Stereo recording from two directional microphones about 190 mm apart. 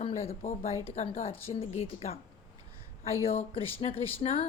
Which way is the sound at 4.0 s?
30° left (ahead or behind).